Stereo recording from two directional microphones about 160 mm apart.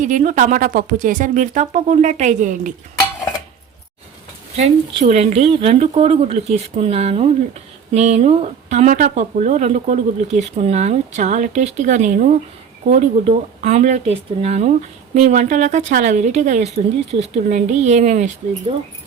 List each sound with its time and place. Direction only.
0.0 s speech: 50° right (ahead or behind)
4.5 s speech: 40° right (ahead or behind)